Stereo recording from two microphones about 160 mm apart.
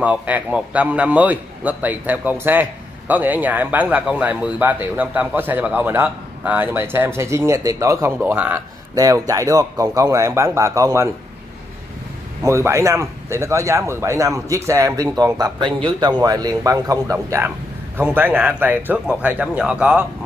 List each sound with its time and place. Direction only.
0.0 s a man's voice: 10° right (ahead or behind)
8.9 s speech: 20° right (ahead or behind)
12.4 s a man's voice: 15° right (ahead or behind)